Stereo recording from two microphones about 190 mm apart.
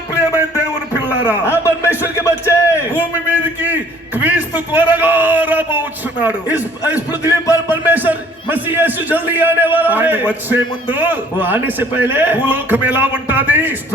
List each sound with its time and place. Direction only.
1.5 s music: 15° left (ahead or behind)
2.9 s a man's voice: 10° right (ahead or behind)
7.1 s music: 20° left (ahead or behind)
7.7 s a man's voice: 10° right (ahead or behind)